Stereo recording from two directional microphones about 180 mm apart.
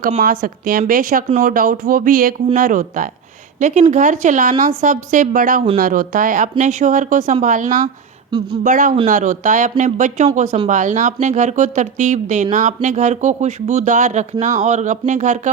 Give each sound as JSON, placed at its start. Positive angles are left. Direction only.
{"t": 0.2, "sound": "speech", "side_deg": -50}